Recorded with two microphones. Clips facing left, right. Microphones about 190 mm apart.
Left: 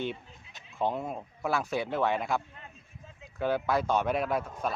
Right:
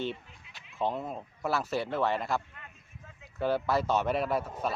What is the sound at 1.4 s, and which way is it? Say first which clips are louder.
Speech: even; 5° right (ahead or behind).